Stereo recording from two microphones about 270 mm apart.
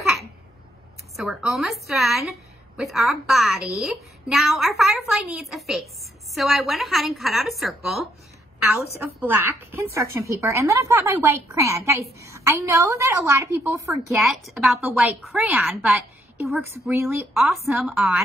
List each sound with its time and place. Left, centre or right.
1.1 s a woman's voice: centre
9.2 s a woman's voice: centre